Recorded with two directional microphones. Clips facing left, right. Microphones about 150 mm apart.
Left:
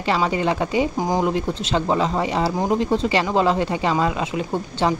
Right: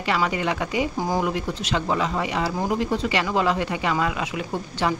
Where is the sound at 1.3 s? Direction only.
30° left (ahead or behind).